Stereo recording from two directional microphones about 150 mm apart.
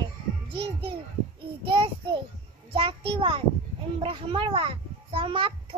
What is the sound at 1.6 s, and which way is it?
A child's voice, 35° right (ahead or behind).